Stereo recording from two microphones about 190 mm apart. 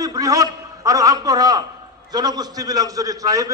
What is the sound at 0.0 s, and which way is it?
A man's voice, 20° right (ahead or behind).